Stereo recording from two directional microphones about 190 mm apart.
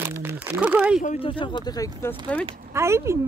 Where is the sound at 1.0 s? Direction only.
35° left (ahead or behind); by 2.0 s 15° left (ahead or behind).